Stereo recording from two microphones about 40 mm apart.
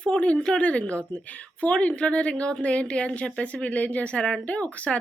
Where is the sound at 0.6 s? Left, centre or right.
Left.